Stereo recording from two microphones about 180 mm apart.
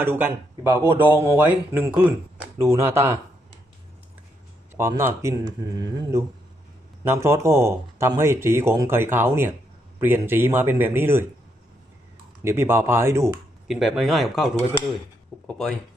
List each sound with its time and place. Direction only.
0.0 s speech: 10° right (ahead or behind)
4.7 s speech: 15° right (ahead or behind)
12.4 s speech: 15° right (ahead or behind)
13.7 s speech: centre (ahead or behind)